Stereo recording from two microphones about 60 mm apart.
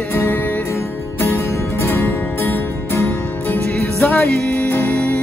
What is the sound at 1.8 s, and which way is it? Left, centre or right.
Music, left.